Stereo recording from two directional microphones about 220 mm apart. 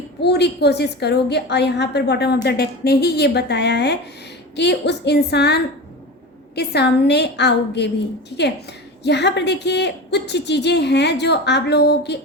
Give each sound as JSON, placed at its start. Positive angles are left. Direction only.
{"t": 0.2, "sound": "a woman's voice", "side_deg": 50}
{"t": 9.0, "sound": "a woman's voice", "side_deg": 50}